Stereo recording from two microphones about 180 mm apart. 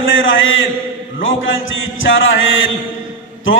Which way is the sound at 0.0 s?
90° left.